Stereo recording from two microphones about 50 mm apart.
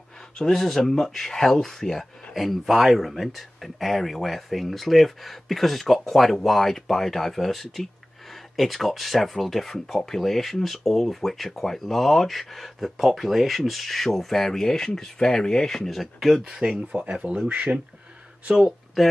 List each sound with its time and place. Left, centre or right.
0.4 s speech: centre
16.4 s speech: centre